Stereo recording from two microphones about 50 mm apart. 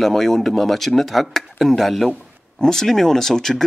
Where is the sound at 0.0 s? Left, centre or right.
Centre.